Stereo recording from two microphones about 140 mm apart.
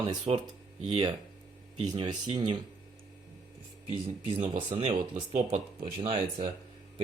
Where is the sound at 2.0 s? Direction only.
30° right (ahead or behind).